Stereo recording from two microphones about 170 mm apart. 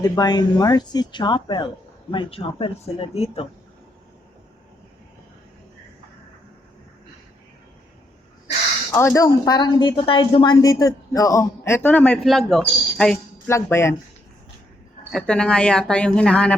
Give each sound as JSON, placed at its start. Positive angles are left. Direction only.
{"t": 0.0, "sound": "a woman's voice", "side_deg": 25}
{"t": 8.9, "sound": "a woman's voice", "side_deg": 15}
{"t": 13.5, "sound": "speech", "side_deg": 15}
{"t": 15.1, "sound": "speech", "side_deg": 5}